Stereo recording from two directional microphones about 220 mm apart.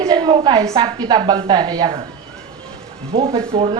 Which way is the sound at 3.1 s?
25° right (ahead or behind).